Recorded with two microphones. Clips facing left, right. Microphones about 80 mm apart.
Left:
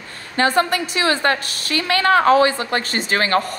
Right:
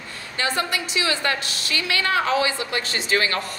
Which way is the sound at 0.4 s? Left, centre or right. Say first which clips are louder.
Left 8 dB; left.